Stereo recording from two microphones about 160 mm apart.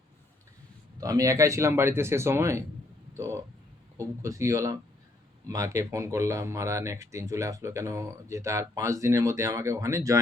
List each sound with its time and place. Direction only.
0.9 s speech: 20° right (ahead or behind)
3.9 s speech: 20° right (ahead or behind)